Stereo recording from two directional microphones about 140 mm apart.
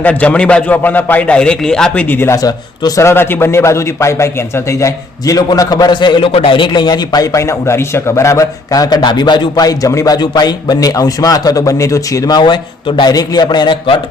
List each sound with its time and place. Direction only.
0.0 s a man's voice: 10° left (ahead or behind); by 14.0 s 35° left (ahead or behind)